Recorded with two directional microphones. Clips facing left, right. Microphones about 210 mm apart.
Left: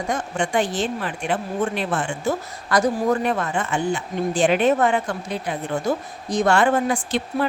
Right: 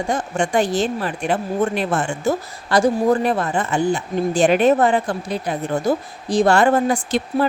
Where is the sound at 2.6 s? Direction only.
30° right (ahead or behind).